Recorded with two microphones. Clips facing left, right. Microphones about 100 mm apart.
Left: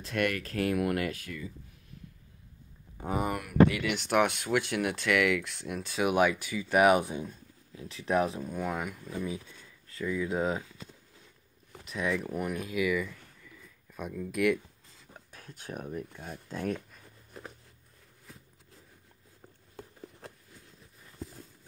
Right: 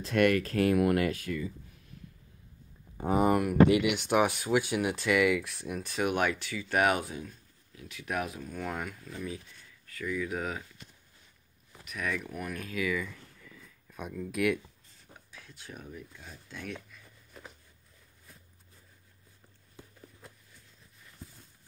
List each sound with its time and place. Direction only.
0.0 s speech: 35° right (ahead or behind)
3.0 s speech: 40° right (ahead or behind)
3.7 s speech: 10° right (ahead or behind); by 8.5 s 25° left (ahead or behind)
8.5 s speech: 10° left (ahead or behind)
9.0 s speech: 20° left (ahead or behind)
11.8 s speech: 25° left (ahead or behind); by 14.6 s centre (ahead or behind)
15.3 s speech: 45° left (ahead or behind)
16.4 s speech: 40° left (ahead or behind)